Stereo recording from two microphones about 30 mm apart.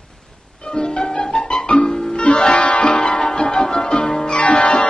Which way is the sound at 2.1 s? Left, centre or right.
Left.